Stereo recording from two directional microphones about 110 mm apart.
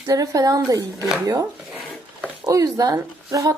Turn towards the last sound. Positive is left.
turn(degrees=-35)  # may be behind; listen again after turning